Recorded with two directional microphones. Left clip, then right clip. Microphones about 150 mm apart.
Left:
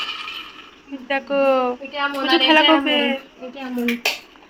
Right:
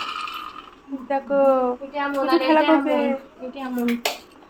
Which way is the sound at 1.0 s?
5° right (ahead or behind).